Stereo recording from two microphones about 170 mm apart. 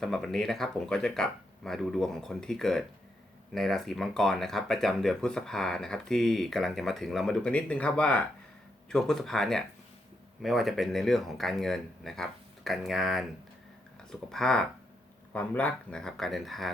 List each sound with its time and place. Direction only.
0.0 s speech: centre (ahead or behind)